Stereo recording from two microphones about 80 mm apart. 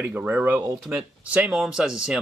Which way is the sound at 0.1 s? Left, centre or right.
Centre.